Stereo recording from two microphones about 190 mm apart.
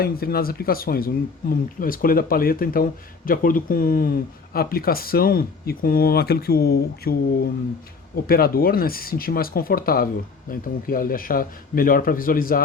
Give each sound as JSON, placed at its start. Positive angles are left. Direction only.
{"t": 0.0, "sound": "speech", "side_deg": 50}